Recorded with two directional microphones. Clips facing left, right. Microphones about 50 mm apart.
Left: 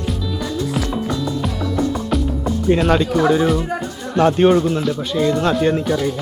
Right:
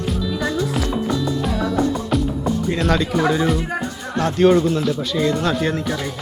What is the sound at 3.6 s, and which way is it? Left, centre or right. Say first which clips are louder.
Speech: left 1 dB; centre.